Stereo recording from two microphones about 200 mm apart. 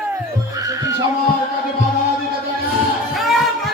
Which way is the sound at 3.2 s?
Centre (ahead or behind).